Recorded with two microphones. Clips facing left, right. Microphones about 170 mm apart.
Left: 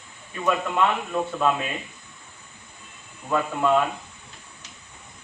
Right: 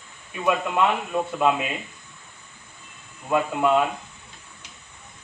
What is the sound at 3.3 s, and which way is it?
Speech, 10° right (ahead or behind).